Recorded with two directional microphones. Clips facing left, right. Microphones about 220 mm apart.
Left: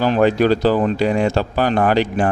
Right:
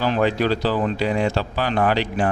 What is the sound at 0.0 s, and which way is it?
Speech, 45° left (ahead or behind).